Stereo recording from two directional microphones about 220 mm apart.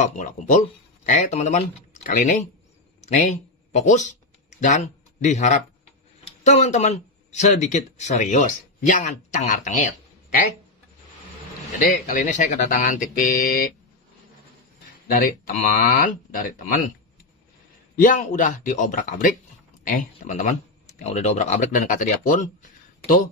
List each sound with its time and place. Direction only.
0.0 s speech: 35° left (ahead or behind)
12.1 s speech: 35° left (ahead or behind)
15.1 s speech: 40° left (ahead or behind)
17.9 s speech: 35° left (ahead or behind)